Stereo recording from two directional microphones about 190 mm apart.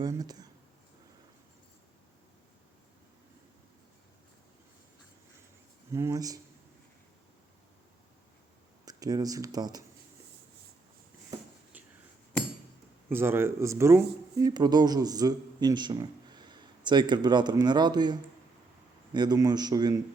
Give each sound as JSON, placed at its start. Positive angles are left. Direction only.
{"t": 0.0, "sound": "a man's voice", "side_deg": -20}
{"t": 5.9, "sound": "speech", "side_deg": -15}
{"t": 8.8, "sound": "speech", "side_deg": -20}
{"t": 13.1, "sound": "a man's voice", "side_deg": -10}